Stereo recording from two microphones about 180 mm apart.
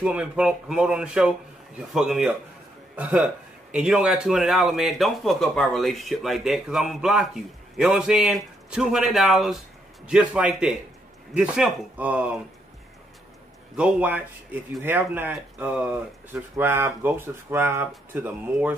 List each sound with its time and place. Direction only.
0.0 s speech: 5° right (ahead or behind)
13.7 s speech: 5° right (ahead or behind)